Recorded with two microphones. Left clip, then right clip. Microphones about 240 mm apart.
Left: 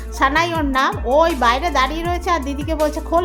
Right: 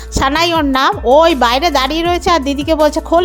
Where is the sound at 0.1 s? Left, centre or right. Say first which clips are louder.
Right 4 dB; right.